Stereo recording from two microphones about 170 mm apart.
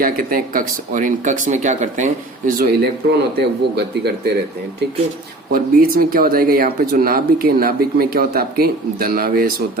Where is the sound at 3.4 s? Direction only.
75° right (ahead or behind).